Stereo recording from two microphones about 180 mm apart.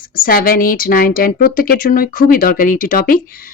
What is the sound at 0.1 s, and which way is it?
A woman's voice, 55° left (ahead or behind).